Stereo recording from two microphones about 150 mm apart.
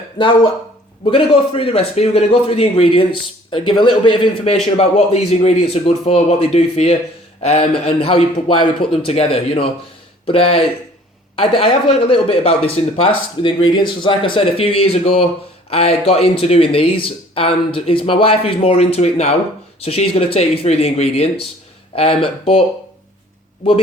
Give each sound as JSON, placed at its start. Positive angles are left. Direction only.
{"t": 0.2, "sound": "a man's voice", "side_deg": 30}